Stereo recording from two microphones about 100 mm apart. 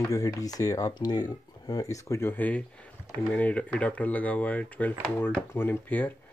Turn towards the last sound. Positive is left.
turn(degrees=15)  # may be behind; listen again after turning